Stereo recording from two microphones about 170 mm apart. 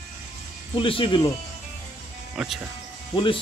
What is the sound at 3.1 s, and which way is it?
Speech, 30° left (ahead or behind).